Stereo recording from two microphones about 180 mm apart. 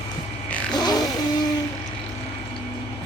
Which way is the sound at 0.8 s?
20° left (ahead or behind).